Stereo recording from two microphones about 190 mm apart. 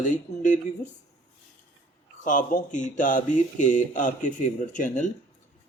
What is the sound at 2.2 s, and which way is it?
A man's voice, 45° left (ahead or behind).